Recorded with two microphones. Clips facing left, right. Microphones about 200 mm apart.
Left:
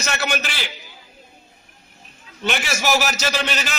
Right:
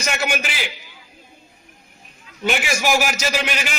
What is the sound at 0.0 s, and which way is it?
Speech, 10° right (ahead or behind).